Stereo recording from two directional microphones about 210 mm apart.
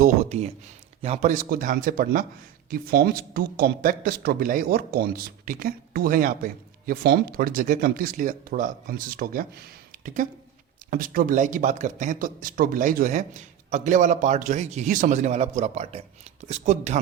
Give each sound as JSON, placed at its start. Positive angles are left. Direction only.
{"t": 0.0, "sound": "a man's voice", "side_deg": -30}